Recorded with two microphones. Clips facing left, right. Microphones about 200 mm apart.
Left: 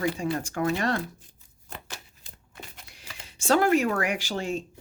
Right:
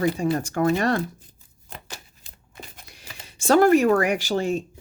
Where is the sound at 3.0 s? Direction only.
40° right (ahead or behind).